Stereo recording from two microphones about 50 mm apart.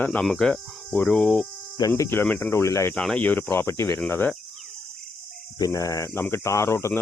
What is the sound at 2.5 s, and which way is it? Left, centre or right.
Speech, left.